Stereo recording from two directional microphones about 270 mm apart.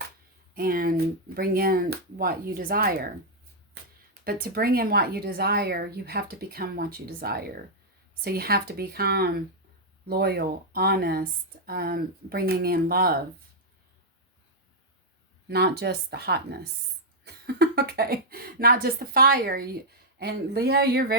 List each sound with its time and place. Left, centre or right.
0.5 s a woman's voice: right
4.2 s a woman's voice: right
15.4 s a woman's voice: right